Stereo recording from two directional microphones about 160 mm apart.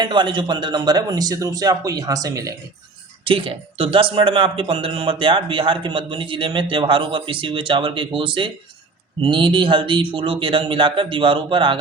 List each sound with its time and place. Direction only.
0.0 s a man's voice: 30° right (ahead or behind)
3.2 s speech: 35° right (ahead or behind)